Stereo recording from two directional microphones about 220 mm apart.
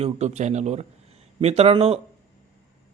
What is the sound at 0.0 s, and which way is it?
A man's voice, 30° right (ahead or behind).